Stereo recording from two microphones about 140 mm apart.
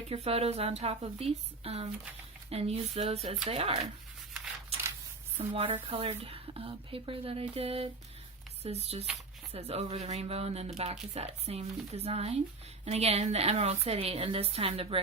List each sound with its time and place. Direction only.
0.1 s speech: 45° right (ahead or behind)
5.5 s speech: 40° right (ahead or behind)